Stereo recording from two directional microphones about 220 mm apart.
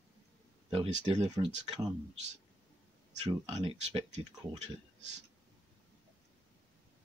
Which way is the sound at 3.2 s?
20° right (ahead or behind).